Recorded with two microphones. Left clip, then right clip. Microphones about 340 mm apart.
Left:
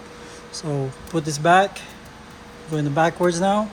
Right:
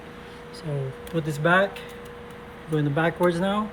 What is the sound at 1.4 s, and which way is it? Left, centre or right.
Speech, centre.